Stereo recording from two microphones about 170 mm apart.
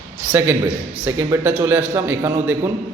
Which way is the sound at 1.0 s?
15° right (ahead or behind).